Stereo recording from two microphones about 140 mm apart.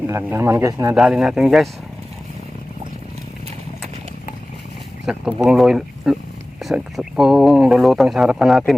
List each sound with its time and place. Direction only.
0.1 s speech: 20° right (ahead or behind)
0.9 s speech: 5° right (ahead or behind)
5.0 s speech: 5° right (ahead or behind)